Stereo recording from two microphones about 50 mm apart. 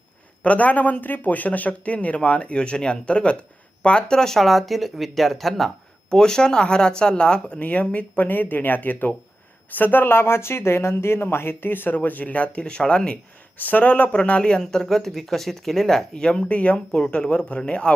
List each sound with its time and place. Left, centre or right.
0.4 s speech: left; by 5.7 s centre
6.1 s speech: centre
7.6 s speech: left
11.9 s speech: left
13.6 s speech: left
14.6 s speech: centre
16.5 s speech: left